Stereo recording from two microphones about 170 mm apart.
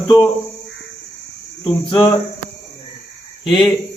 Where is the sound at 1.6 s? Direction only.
30° left (ahead or behind).